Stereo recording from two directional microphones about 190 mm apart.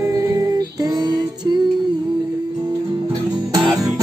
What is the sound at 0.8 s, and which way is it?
Music, 20° right (ahead or behind).